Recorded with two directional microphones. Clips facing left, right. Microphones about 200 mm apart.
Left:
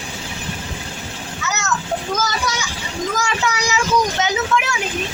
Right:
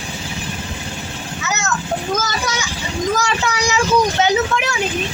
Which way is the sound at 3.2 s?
35° right (ahead or behind).